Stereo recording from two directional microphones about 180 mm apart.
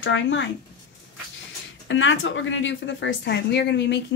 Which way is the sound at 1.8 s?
90° left.